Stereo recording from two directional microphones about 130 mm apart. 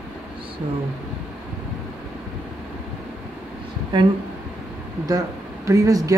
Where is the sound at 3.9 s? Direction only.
40° right (ahead or behind).